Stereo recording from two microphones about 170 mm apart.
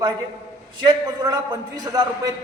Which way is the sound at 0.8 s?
25° right (ahead or behind).